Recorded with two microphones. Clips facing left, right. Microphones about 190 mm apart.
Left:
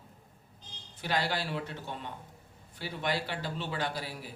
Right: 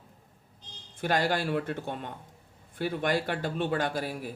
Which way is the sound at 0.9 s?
50° right (ahead or behind).